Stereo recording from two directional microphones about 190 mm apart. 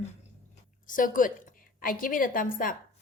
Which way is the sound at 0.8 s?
45° left (ahead or behind).